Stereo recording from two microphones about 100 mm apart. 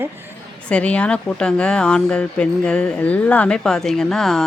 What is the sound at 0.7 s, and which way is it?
Speech, 10° left (ahead or behind).